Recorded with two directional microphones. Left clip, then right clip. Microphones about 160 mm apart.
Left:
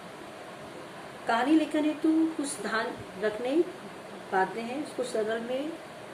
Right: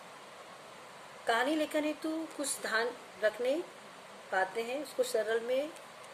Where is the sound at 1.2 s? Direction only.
70° right (ahead or behind).